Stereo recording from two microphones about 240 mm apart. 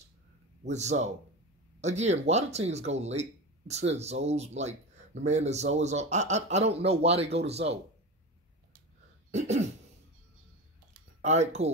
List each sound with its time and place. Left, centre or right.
0.7 s speech: right
9.3 s throat clearing: right
11.1 s speech: right